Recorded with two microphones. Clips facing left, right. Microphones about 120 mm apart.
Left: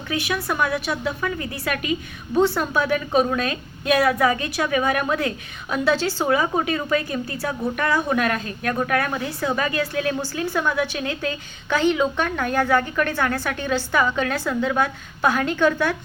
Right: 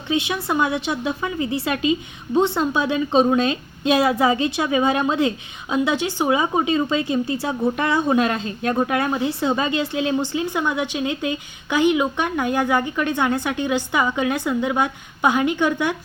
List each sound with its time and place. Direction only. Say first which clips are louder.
0.1 s a woman's voice: right 3 dB; 20° right (ahead or behind)